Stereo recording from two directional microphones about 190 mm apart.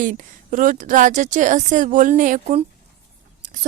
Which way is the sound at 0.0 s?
40° right (ahead or behind).